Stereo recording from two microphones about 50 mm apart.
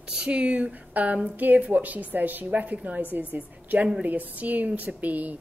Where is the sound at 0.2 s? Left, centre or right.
Right.